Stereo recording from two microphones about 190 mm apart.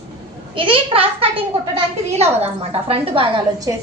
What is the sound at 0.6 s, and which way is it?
A child's voice, 30° right (ahead or behind).